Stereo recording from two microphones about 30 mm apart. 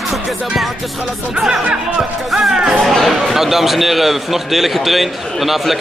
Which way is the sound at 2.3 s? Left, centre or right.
Centre.